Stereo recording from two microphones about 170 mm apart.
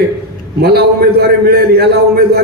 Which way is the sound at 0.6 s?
70° right (ahead or behind).